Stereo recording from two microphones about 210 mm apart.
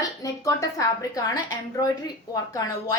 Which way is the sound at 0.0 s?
15° left (ahead or behind).